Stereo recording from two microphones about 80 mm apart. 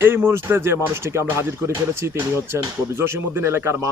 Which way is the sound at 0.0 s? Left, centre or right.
Right.